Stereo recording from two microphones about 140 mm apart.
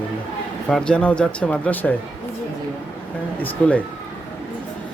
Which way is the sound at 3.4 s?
10° left (ahead or behind).